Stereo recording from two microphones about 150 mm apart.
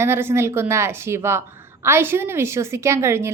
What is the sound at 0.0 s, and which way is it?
A woman's voice, 15° right (ahead or behind).